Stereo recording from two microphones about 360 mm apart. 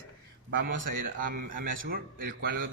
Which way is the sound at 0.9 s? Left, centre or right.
Right.